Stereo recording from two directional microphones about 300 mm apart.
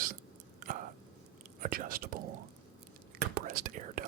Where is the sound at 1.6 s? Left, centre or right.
Right.